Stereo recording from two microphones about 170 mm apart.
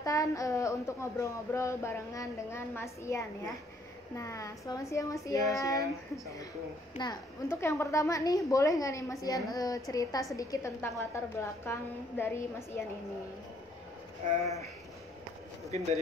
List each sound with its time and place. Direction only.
0.0 s a woman's voice: 20° left (ahead or behind)
14.4 s speech: 40° right (ahead or behind)